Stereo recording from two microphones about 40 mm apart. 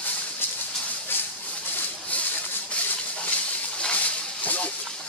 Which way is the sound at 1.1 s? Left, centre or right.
Left.